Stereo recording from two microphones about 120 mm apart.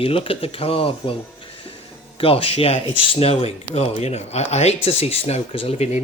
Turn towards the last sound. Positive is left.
turn(degrees=60)  # may be behind; listen again after turning